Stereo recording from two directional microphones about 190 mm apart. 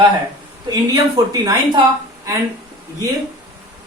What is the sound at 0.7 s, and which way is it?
Speech, 20° right (ahead or behind).